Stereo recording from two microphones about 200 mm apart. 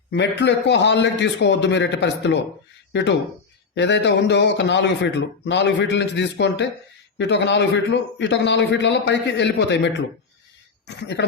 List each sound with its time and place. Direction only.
0.1 s speech: 60° left (ahead or behind)